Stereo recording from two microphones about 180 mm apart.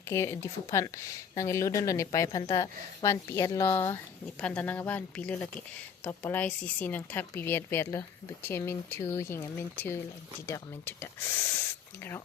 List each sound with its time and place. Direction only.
0.1 s speech: 15° left (ahead or behind)